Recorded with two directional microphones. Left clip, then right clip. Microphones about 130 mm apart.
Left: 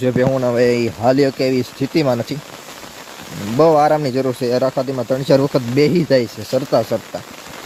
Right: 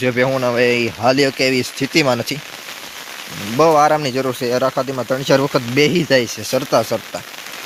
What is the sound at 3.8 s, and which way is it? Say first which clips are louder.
Speech: even; centre (ahead or behind).